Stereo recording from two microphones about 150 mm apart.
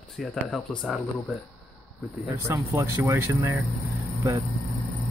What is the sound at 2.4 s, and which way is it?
Speech, 20° right (ahead or behind).